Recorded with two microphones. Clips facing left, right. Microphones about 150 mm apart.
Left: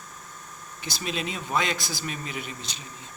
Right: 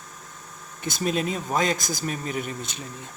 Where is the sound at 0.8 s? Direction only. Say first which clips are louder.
Right 6 dB; 50° right (ahead or behind).